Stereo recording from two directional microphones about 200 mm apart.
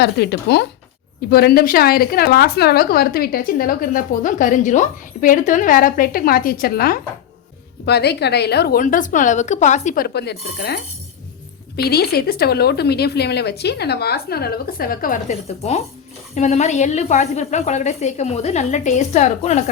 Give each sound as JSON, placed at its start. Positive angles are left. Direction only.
{"t": 0.0, "sound": "a woman's voice", "side_deg": 55}
{"t": 11.8, "sound": "a woman's voice", "side_deg": 50}